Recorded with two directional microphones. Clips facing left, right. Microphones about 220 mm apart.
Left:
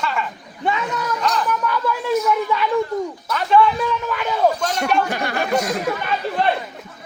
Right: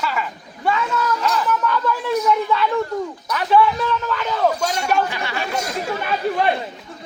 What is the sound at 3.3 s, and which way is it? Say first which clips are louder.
Speech: even; 5° right (ahead or behind).